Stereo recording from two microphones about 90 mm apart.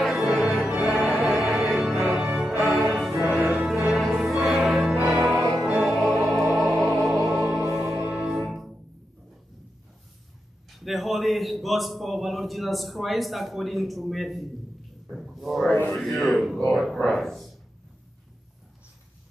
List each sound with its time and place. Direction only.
0.0 s music: centre (ahead or behind)
8.0 s music: 10° right (ahead or behind)
10.7 s a man's voice: centre (ahead or behind)
15.1 s a sound: centre (ahead or behind)
15.9 s a man's voice: centre (ahead or behind)
16.5 s a sound: centre (ahead or behind)